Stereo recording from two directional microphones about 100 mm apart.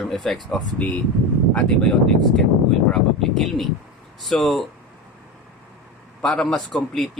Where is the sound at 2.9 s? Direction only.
Centre (ahead or behind).